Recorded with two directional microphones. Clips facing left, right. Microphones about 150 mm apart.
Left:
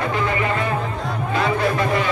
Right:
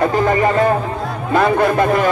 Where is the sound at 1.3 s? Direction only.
50° right (ahead or behind).